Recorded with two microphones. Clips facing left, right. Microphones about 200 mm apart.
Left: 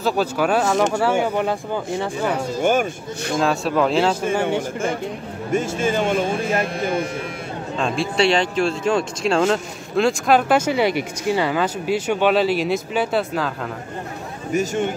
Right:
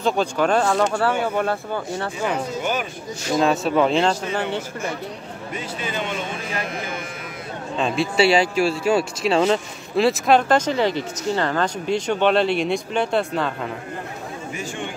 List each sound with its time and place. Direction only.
0.0 s speech: 5° left (ahead or behind)
2.6 s speech: 50° left (ahead or behind)
3.3 s speech: centre (ahead or behind)
4.6 s speech: 50° left (ahead or behind)
7.7 s speech: centre (ahead or behind)
14.5 s speech: 40° left (ahead or behind)